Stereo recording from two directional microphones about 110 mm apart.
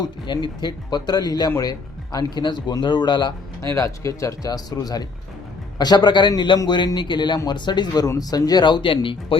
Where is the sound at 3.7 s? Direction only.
30° left (ahead or behind); by 9.3 s 50° left (ahead or behind).